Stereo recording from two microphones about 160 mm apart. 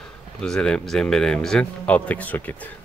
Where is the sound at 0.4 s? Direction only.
5° left (ahead or behind).